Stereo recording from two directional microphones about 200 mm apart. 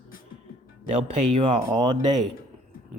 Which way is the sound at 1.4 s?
25° right (ahead or behind).